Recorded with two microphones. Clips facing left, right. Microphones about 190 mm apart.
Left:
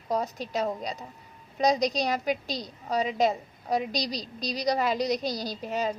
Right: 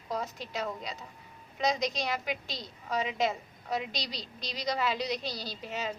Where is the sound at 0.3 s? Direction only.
40° left (ahead or behind).